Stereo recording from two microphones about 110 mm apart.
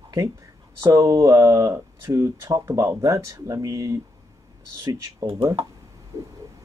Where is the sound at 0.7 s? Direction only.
25° right (ahead or behind).